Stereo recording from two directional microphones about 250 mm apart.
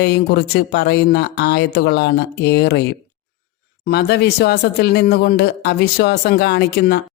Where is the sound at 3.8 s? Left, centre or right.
Left.